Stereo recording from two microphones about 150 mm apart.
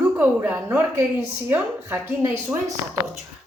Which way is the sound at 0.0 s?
15° right (ahead or behind).